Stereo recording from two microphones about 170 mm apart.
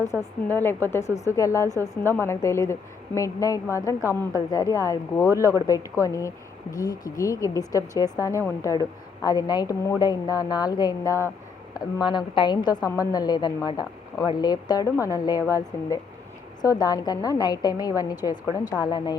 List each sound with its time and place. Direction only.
0.1 s speech: 15° left (ahead or behind)